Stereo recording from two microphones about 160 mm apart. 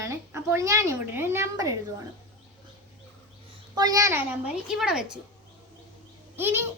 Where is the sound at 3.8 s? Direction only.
20° right (ahead or behind); by 5.0 s 5° right (ahead or behind).